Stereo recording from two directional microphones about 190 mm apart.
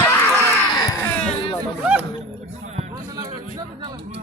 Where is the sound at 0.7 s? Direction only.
20° left (ahead or behind).